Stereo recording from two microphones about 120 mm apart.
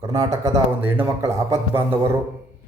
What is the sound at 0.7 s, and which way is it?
A man's voice, 15° right (ahead or behind).